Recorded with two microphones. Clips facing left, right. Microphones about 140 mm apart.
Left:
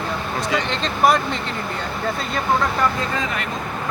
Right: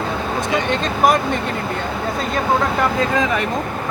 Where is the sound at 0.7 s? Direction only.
50° right (ahead or behind).